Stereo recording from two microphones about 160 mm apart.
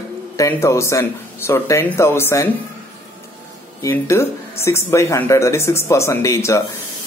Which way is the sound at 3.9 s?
15° left (ahead or behind).